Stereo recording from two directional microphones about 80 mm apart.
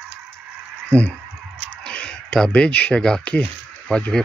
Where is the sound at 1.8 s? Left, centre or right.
Centre.